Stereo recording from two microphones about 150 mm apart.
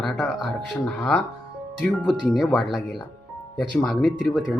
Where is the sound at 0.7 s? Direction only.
10° left (ahead or behind).